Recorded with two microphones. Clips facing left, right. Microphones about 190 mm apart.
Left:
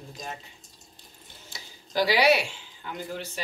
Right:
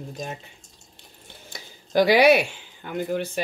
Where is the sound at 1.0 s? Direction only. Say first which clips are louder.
Right 5 dB; 55° right (ahead or behind).